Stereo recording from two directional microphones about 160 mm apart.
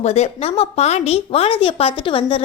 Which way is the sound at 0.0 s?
40° left (ahead or behind).